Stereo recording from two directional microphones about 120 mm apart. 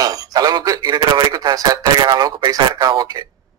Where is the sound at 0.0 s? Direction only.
30° right (ahead or behind).